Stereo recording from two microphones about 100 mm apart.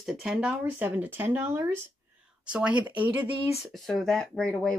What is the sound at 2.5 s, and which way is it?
Speech, 10° right (ahead or behind).